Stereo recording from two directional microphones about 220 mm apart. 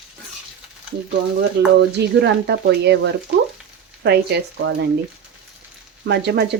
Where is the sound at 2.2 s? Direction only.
50° right (ahead or behind).